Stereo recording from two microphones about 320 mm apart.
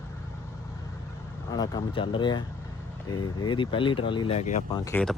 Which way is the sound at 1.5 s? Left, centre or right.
Centre.